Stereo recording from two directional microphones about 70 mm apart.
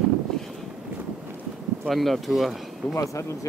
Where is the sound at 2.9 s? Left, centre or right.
Left.